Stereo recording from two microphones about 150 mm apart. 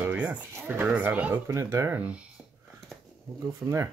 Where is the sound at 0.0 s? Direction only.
10° right (ahead or behind).